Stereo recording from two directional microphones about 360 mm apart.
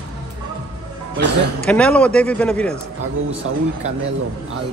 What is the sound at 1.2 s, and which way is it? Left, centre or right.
Speech, right.